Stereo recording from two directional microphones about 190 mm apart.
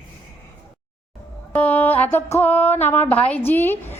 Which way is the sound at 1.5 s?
10° left (ahead or behind).